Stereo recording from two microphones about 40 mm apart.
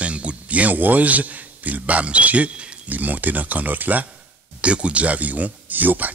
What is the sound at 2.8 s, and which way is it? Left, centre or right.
Speech, right.